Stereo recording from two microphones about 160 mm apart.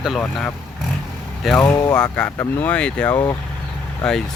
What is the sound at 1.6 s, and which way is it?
Speech, 15° left (ahead or behind).